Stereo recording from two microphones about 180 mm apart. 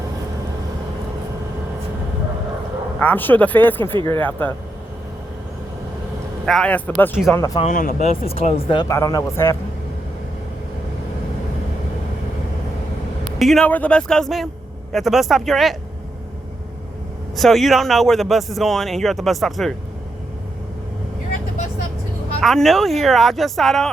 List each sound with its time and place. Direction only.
3.0 s speech: 10° left (ahead or behind)
6.4 s speech: 5° left (ahead or behind); by 7.6 s 20° left (ahead or behind)
7.6 s speech: 45° left (ahead or behind)
8.3 s speech: 35° left (ahead or behind)
8.9 s speech: 20° left (ahead or behind)
13.4 s speech: centre (ahead or behind)
17.3 s speech: centre (ahead or behind)
22.4 s speech: centre (ahead or behind)